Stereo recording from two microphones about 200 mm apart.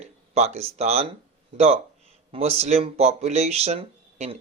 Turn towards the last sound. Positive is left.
turn(degrees=-30)  # may be behind; listen again after turning